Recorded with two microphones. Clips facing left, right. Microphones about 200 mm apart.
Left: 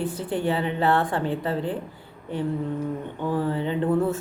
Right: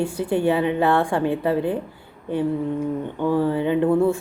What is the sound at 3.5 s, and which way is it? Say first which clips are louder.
Speech: right 5 dB; 15° right (ahead or behind).